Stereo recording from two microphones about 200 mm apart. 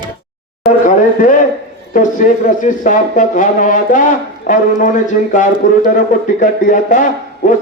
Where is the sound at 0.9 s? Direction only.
40° left (ahead or behind).